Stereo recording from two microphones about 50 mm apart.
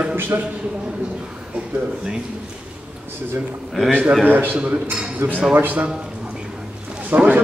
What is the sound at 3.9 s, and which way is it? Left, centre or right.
A man's voice, right.